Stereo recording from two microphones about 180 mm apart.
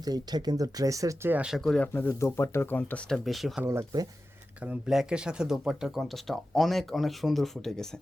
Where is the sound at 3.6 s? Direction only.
20° right (ahead or behind).